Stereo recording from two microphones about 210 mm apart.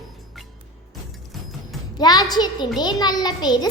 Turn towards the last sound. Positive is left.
turn(degrees=20)  # may be behind; listen again after turning